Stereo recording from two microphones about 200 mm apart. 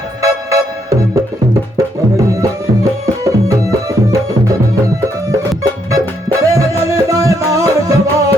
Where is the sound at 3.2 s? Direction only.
15° right (ahead or behind).